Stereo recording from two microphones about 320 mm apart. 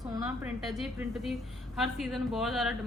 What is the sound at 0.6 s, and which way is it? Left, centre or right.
A woman's voice, centre.